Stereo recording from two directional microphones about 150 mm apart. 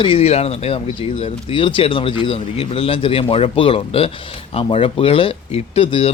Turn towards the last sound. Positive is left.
turn(degrees=40)  # may be behind; listen again after turning